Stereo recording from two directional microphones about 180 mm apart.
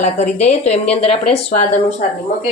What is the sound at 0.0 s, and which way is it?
Speech, 40° left (ahead or behind).